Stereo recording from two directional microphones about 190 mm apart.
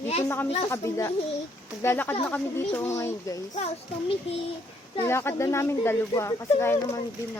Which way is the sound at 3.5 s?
35° left (ahead or behind).